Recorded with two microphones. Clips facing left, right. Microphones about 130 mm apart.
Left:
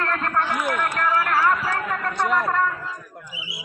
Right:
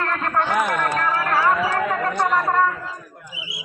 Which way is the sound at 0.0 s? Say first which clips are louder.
Right 1 dB; 15° right (ahead or behind).